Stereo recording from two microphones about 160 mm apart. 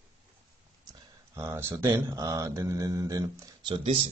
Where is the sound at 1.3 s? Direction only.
15° right (ahead or behind).